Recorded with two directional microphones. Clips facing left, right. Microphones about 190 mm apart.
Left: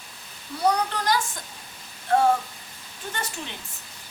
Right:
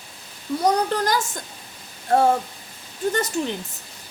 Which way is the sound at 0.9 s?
45° right (ahead or behind).